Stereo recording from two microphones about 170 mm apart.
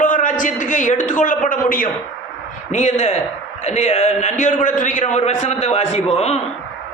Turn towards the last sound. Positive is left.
turn(degrees=40)  # may be behind; listen again after turning